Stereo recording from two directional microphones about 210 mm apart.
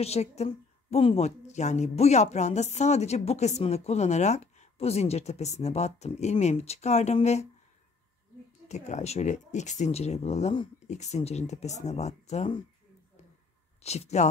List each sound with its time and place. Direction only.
0.0 s a woman's voice: 30° left (ahead or behind)
8.6 s a woman's voice: 35° left (ahead or behind)
13.8 s a woman's voice: 30° left (ahead or behind)